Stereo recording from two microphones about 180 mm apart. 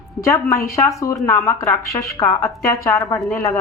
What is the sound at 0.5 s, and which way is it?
Speech, 15° left (ahead or behind).